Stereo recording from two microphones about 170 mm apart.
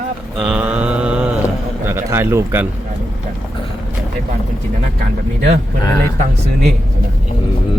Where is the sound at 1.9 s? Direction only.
15° right (ahead or behind).